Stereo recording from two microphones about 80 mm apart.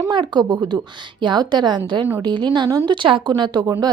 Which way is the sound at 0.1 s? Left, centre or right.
Right.